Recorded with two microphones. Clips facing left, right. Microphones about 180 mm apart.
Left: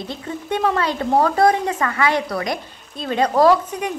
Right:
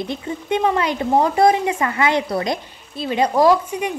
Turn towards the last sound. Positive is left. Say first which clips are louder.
# even
turn(degrees=-10)  # may be behind; listen again after turning